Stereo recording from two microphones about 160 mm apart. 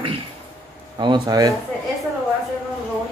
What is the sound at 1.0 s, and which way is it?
Speech, 25° right (ahead or behind).